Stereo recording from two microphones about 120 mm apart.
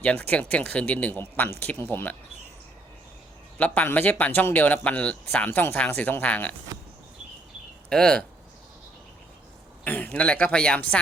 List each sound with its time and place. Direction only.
0.0 s speech: 10° left (ahead or behind)
3.6 s speech: 15° left (ahead or behind)
7.9 s speech: 5° left (ahead or behind)
9.8 s speech: 15° left (ahead or behind)